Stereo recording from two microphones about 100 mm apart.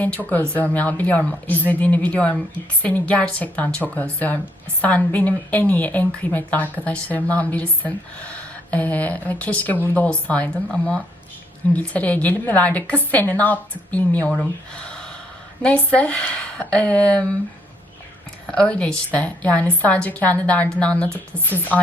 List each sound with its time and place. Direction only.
0.0 s a woman's voice: 15° left (ahead or behind)
18.5 s a woman's voice: 10° left (ahead or behind)